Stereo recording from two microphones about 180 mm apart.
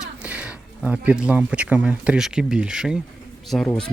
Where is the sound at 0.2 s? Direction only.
5° right (ahead or behind).